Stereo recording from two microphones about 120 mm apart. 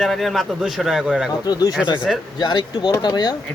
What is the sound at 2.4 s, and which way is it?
Speech, 40° left (ahead or behind).